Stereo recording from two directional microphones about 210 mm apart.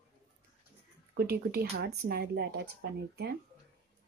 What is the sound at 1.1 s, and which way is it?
Speech, 45° right (ahead or behind).